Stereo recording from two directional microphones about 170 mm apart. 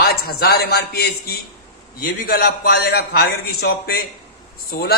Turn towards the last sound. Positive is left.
turn(degrees=65)  # may be behind; listen again after turning